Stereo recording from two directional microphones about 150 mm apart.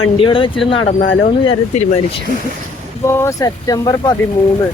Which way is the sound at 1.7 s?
50° left (ahead or behind).